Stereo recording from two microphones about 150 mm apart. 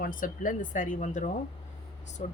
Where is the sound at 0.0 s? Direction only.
65° left (ahead or behind).